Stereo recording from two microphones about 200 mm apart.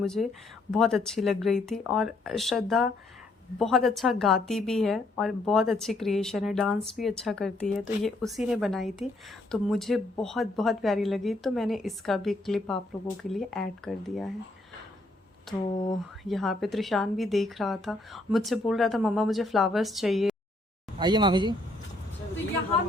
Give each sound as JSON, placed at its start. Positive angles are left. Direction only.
{"t": 0.0, "sound": "a woman's voice", "side_deg": 0}
{"t": 15.5, "sound": "a woman's voice", "side_deg": 0}
{"t": 21.0, "sound": "speech", "side_deg": -20}